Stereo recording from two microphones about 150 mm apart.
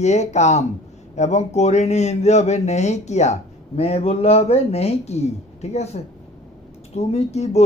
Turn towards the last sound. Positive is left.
turn(degrees=45)  # may be behind; listen again after turning